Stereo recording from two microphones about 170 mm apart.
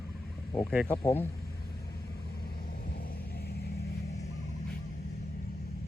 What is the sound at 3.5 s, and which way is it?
Vehicle, 65° left (ahead or behind).